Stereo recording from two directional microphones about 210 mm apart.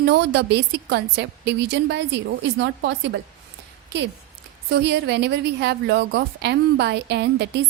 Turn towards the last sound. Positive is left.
turn(degrees=-55)  # may be behind; listen again after turning